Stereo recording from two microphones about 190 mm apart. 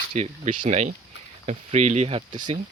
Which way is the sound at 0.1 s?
40° right (ahead or behind).